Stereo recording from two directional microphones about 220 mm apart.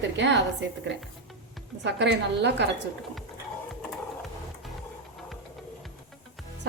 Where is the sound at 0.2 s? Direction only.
50° right (ahead or behind).